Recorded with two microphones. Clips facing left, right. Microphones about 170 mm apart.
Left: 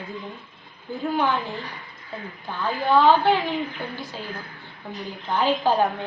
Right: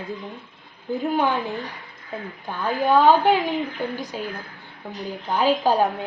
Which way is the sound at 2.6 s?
15° right (ahead or behind).